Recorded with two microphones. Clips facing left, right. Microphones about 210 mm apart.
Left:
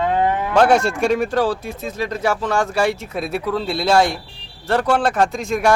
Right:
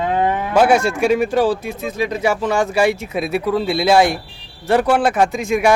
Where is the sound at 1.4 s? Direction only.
15° right (ahead or behind).